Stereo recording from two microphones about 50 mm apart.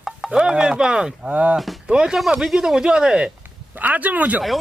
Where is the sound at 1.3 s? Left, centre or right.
Right.